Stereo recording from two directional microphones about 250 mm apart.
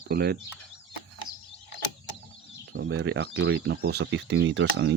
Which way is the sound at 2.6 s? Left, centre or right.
Right.